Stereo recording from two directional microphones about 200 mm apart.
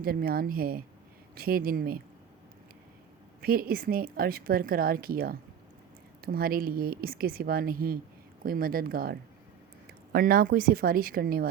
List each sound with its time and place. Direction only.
0.0 s a woman's voice: 50° right (ahead or behind)
3.4 s a woman's voice: 50° right (ahead or behind)